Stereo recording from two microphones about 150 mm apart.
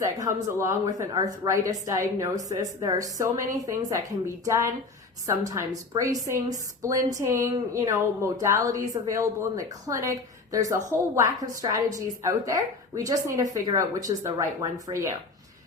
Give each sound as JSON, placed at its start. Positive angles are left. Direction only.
{"t": 0.0, "sound": "speech", "side_deg": -25}